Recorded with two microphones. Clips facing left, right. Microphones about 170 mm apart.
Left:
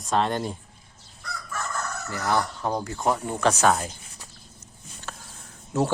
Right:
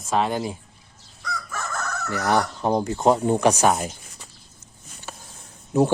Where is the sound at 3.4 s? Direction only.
15° right (ahead or behind).